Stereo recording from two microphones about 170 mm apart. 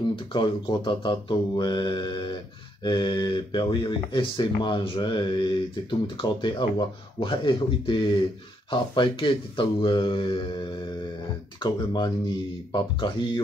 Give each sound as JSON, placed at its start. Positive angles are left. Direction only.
{"t": 0.1, "sound": "speech", "side_deg": 25}